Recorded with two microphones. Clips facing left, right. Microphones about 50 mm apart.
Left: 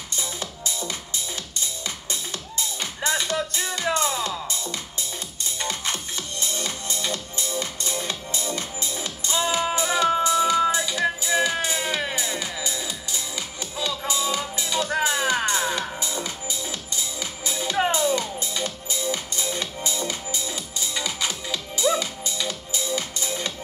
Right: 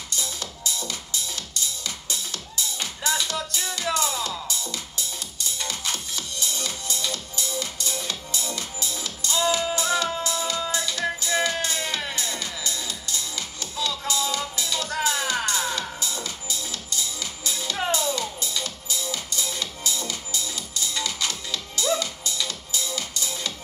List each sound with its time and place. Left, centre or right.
0.1 s music: left